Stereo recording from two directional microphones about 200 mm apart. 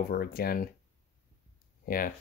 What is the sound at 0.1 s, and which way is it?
Speech, 50° left (ahead or behind).